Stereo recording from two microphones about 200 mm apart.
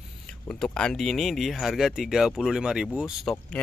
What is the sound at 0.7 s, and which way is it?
Speech, 5° left (ahead or behind).